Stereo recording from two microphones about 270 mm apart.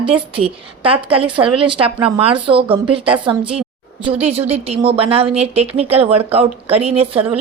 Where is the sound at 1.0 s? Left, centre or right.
Centre.